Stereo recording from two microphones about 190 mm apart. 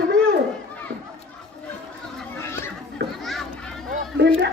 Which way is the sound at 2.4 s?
15° left (ahead or behind).